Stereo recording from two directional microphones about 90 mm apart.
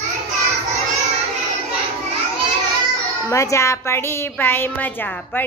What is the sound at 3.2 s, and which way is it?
A woman's voice, 35° left (ahead or behind).